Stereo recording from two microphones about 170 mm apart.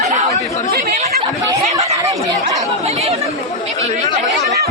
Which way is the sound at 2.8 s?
40° right (ahead or behind).